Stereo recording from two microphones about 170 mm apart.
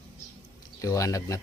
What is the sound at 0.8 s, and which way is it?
Speech, 20° left (ahead or behind).